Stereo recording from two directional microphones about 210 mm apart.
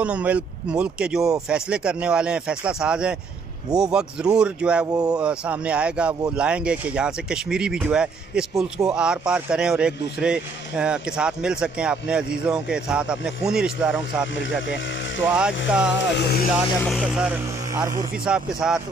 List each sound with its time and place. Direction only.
0.0 s speech: 5° right (ahead or behind)
4.9 s speech: 15° right (ahead or behind)
5.2 s speech: 5° right (ahead or behind)
16.0 s speech: 50° left (ahead or behind)
16.8 s speech: centre (ahead or behind)